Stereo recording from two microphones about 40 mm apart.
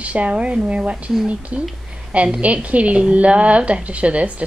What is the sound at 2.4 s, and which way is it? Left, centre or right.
A woman's voice, right.